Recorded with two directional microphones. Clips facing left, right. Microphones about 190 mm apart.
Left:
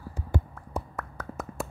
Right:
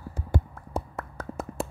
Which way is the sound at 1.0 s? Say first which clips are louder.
Right 2 dB; 30° right (ahead or behind).